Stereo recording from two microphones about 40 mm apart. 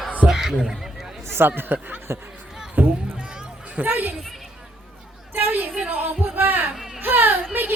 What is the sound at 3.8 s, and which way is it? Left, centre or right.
Speech, right.